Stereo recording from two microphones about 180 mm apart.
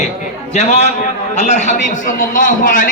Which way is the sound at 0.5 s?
35° left (ahead or behind).